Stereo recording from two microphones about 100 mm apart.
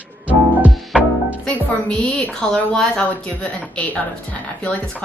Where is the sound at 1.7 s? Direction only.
15° left (ahead or behind).